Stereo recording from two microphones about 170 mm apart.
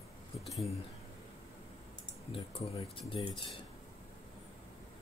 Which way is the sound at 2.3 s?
30° left (ahead or behind).